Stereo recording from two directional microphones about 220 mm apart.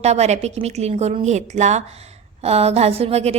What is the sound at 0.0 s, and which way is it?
A woman's voice, 30° right (ahead or behind).